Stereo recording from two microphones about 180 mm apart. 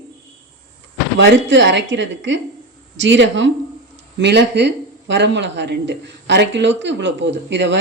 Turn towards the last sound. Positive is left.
turn(degrees=-80)